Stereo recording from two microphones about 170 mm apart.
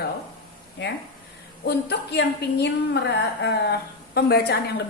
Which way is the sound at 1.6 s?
75° left (ahead or behind).